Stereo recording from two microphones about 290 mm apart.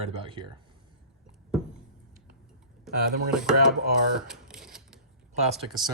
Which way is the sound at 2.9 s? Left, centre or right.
Centre.